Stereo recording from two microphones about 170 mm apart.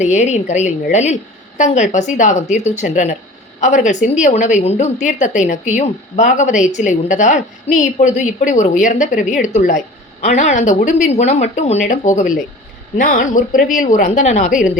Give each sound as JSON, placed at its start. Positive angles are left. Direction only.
{"t": 0.0, "sound": "a woman's voice", "side_deg": 45}